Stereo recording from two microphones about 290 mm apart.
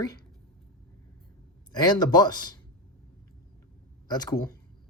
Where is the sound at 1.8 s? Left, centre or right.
Centre.